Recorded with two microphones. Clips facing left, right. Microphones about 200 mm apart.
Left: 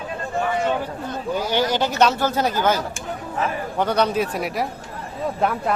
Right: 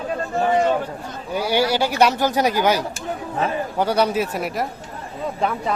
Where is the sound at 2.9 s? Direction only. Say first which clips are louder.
Right 2 dB; 35° right (ahead or behind).